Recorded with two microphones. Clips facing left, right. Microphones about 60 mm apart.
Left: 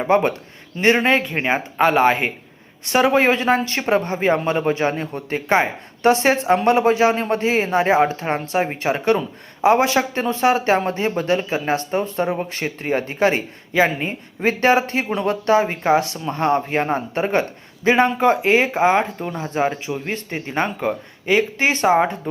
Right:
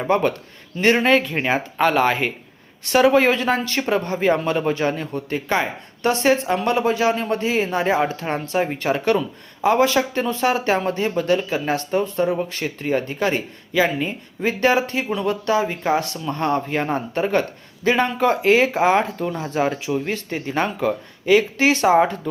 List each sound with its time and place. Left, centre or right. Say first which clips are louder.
0.0 s speech: left 2 dB; centre
0.8 s speech: even; centre
3.1 s a man's voice: left 1 dB; centre
8.9 s speech: left 1 dB; centre
9.1 s a man's voice: right 1 dB; left
17.8 s a man's voice: left 3 dB; left
18.2 s speech: even; centre
19.9 s speech: right 4 dB; centre
20.3 s a man's voice: even; centre